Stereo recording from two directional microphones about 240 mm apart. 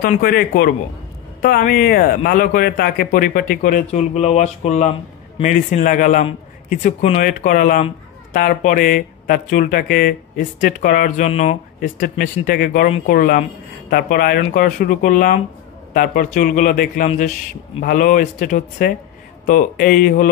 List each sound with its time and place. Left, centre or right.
0.0 s a man's voice: left